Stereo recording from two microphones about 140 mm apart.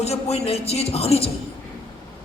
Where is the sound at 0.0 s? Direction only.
50° left (ahead or behind).